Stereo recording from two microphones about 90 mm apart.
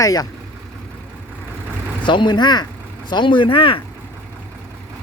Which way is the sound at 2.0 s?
60° left (ahead or behind).